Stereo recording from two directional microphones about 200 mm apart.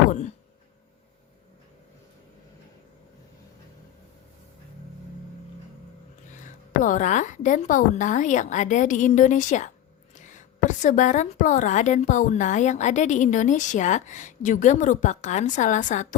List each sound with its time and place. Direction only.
6.3 s a woman's voice: 40° left (ahead or behind)